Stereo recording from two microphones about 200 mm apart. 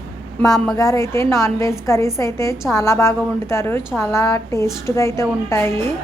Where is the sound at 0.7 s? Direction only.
15° left (ahead or behind).